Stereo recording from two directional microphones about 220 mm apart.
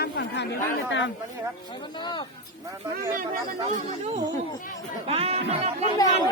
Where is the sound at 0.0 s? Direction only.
50° left (ahead or behind).